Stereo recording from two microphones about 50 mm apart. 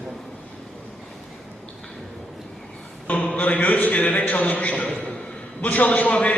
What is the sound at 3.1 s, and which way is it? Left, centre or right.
A man's voice, left.